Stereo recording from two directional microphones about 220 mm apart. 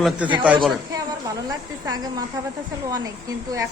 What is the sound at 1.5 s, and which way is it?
Speech, 15° right (ahead or behind).